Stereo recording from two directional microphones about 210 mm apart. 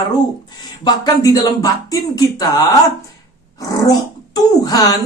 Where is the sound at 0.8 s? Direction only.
20° left (ahead or behind).